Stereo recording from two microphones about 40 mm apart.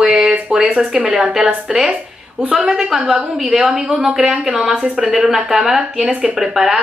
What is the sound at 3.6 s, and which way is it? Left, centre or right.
Speech, centre.